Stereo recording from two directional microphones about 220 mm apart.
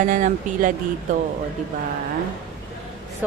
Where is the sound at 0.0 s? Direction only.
35° right (ahead or behind).